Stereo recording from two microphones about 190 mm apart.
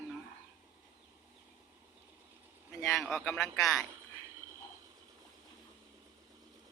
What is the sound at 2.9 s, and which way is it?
Speech, centre (ahead or behind).